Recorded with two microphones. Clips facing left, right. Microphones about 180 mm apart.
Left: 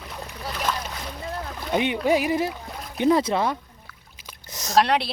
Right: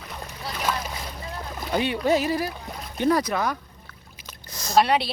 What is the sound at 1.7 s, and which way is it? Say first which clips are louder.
Speech: left 1 dB; 20° left (ahead or behind).